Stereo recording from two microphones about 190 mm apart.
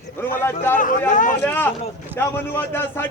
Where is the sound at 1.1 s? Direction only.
45° left (ahead or behind).